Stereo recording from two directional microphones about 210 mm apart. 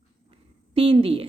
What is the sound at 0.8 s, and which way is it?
Speech, 25° right (ahead or behind).